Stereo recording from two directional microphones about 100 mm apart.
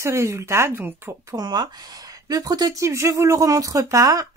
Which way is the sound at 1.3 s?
45° right (ahead or behind).